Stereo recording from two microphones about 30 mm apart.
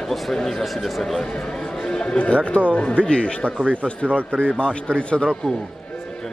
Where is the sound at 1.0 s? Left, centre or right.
Centre.